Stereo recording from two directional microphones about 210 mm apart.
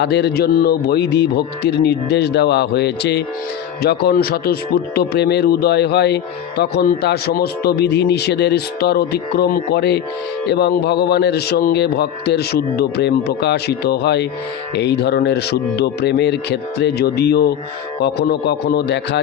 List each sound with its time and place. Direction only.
0.0 s a man's voice: 50° left (ahead or behind)